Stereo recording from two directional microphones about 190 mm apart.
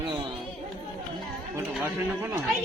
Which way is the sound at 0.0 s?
20° right (ahead or behind).